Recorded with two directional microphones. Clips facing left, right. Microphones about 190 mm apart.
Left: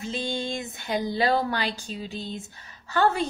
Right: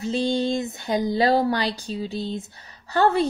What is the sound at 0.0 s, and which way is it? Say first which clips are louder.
Speech: right 7 dB; 40° right (ahead or behind).